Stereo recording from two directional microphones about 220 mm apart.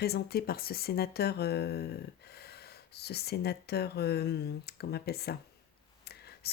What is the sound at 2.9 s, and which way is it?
Speech, 45° left (ahead or behind).